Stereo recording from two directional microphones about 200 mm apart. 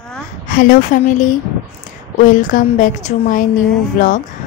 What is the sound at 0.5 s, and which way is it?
Speech, 45° left (ahead or behind).